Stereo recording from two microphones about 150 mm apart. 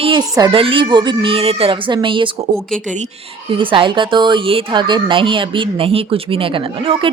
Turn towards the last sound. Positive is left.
turn(degrees=-35)  # may be behind; listen again after turning